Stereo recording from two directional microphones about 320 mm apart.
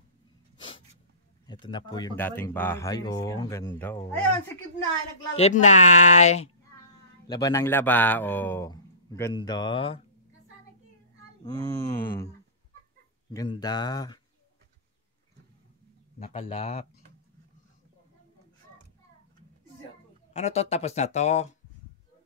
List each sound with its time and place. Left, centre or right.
1.5 s speech: centre
5.3 s speech: left
11.4 s speech: centre
13.3 s speech: centre
16.2 s speech: centre
20.3 s speech: centre